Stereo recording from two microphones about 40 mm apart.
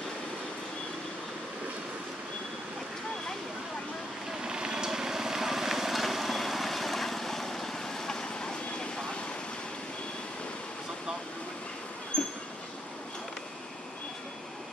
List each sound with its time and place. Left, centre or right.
4.4 s vehicle: centre
12.1 s train: left